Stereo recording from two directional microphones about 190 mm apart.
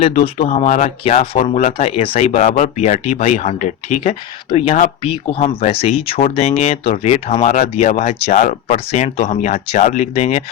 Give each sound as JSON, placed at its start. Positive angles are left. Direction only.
{"t": 0.2, "sound": "speech", "side_deg": 40}